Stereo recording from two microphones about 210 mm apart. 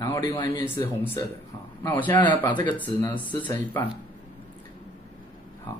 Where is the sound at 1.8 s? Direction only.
15° left (ahead or behind).